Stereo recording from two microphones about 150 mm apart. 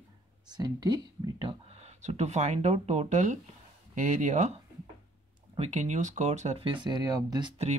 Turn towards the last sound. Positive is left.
turn(degrees=-25)  # may be behind; listen again after turning